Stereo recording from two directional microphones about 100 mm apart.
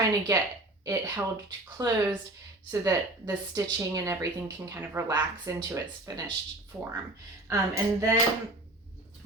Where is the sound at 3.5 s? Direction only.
35° right (ahead or behind).